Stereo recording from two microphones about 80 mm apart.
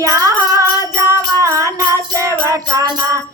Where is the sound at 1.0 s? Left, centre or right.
Right.